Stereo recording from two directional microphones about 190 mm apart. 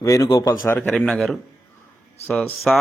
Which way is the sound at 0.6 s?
5° left (ahead or behind).